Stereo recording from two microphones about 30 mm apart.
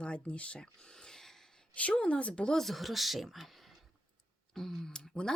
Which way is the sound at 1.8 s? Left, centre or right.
Left.